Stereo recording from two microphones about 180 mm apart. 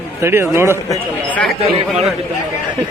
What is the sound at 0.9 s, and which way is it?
Speech, 5° left (ahead or behind).